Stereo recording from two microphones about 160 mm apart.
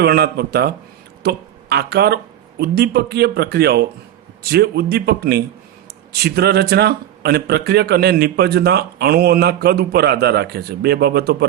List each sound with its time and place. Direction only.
0.0 s a man's voice: 80° right